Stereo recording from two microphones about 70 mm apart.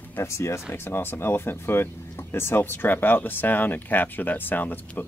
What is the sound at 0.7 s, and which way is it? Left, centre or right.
Speech, left.